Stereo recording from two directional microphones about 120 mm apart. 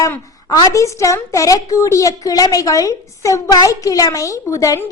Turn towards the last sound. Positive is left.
turn(degrees=25)  # may be behind; listen again after turning